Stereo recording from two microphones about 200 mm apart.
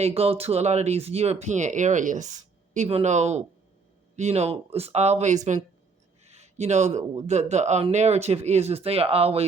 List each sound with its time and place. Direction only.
0.0 s speech: 30° right (ahead or behind)